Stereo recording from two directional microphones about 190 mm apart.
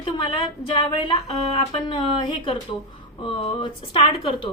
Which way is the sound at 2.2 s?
25° left (ahead or behind).